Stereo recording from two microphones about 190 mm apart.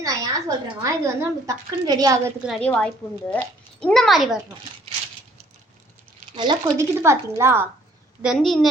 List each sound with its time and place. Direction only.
0.0 s a woman's voice: 20° right (ahead or behind)
2.5 s a woman's voice: 5° left (ahead or behind)
6.3 s a woman's voice: 25° right (ahead or behind)
8.2 s a woman's voice: centre (ahead or behind)